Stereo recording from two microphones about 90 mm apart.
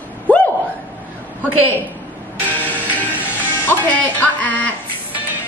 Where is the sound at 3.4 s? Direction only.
25° left (ahead or behind).